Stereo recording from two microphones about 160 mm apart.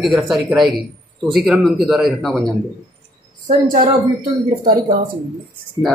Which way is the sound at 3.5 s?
55° right (ahead or behind).